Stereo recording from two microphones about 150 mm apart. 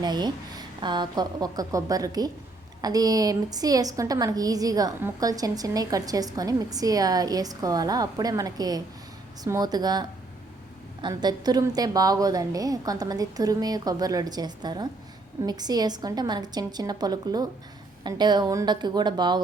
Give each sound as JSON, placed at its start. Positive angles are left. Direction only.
{"t": 0.0, "sound": "a woman's voice", "side_deg": -30}